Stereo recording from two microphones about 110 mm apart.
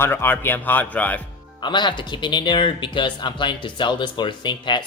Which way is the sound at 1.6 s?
45° left (ahead or behind).